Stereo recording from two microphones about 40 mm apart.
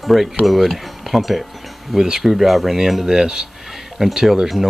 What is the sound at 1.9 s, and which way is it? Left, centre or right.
Speech, centre.